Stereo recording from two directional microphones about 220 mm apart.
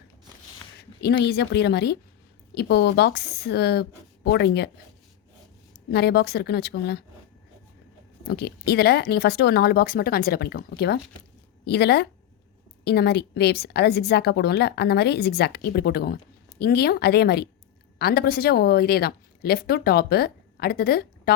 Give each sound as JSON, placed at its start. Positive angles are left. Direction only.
{"t": 0.8, "sound": "a woman's voice", "side_deg": 50}
{"t": 5.9, "sound": "a woman's voice", "side_deg": 50}
{"t": 8.3, "sound": "a woman's voice", "side_deg": 45}